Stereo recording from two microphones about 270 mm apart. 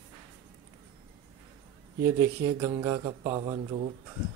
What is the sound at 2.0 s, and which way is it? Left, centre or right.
Speech, centre.